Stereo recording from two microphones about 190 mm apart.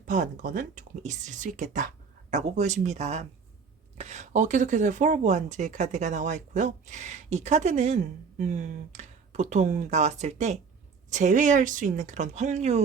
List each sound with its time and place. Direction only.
0.0 s speech: 40° right (ahead or behind)